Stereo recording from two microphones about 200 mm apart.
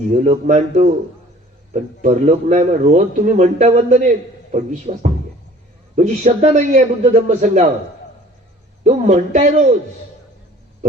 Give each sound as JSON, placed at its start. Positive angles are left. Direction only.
{"t": 0.1, "sound": "a man's voice", "side_deg": -35}
{"t": 8.8, "sound": "a man's voice", "side_deg": -35}